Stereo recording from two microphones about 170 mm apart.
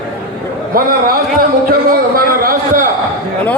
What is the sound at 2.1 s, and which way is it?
Speech, 55° right (ahead or behind).